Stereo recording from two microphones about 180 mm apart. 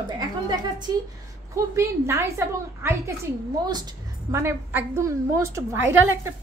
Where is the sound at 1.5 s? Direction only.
15° right (ahead or behind).